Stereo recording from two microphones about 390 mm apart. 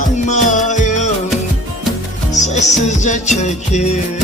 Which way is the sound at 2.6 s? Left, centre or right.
Centre.